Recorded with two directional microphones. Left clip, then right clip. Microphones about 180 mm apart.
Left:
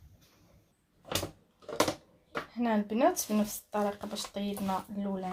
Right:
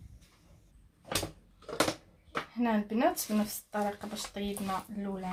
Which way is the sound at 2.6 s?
40° left (ahead or behind).